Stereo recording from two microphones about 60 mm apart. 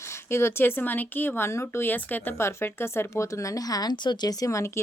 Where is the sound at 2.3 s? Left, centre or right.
Left.